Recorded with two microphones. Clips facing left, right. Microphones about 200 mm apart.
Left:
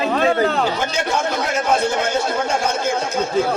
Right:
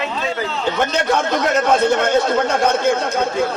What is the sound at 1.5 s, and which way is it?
Speech, 60° right (ahead or behind).